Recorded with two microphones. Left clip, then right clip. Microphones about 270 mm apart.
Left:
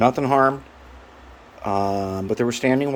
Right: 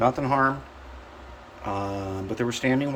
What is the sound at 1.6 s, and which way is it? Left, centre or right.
Speech, left.